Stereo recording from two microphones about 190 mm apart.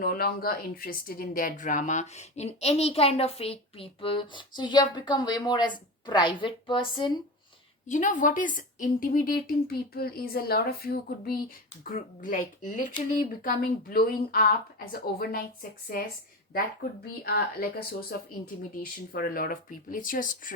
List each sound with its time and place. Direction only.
0.0 s a woman's voice: 50° left (ahead or behind); by 7.1 s 25° left (ahead or behind)
7.9 s speech: 40° left (ahead or behind)
17.2 s speech: 50° left (ahead or behind)